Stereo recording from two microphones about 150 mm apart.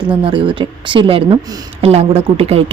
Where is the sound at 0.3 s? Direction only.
35° right (ahead or behind).